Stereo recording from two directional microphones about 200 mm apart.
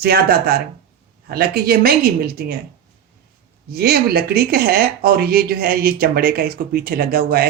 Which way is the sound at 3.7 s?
50° right (ahead or behind).